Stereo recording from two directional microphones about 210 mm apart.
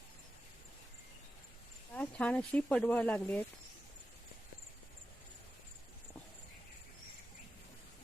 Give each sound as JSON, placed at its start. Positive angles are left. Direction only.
{"t": 1.9, "sound": "speech", "side_deg": 5}